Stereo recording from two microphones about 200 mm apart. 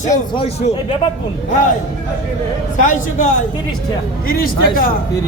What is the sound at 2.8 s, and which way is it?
Speech, 40° left (ahead or behind).